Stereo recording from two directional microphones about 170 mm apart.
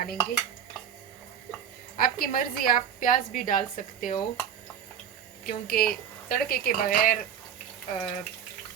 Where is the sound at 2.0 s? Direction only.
60° left (ahead or behind).